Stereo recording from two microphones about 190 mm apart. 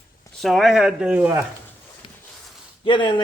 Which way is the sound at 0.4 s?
Centre (ahead or behind).